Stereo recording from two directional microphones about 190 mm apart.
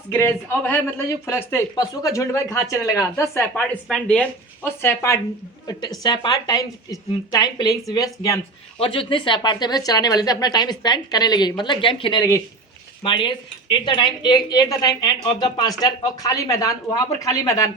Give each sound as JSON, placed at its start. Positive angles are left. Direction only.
{"t": 0.1, "sound": "a woman's voice", "side_deg": 10}